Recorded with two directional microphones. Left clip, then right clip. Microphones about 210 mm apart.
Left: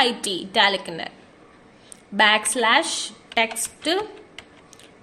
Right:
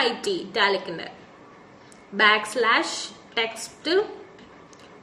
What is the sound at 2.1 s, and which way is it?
A woman's voice, 45° left (ahead or behind).